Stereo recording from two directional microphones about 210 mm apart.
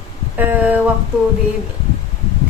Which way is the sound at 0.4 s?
10° right (ahead or behind).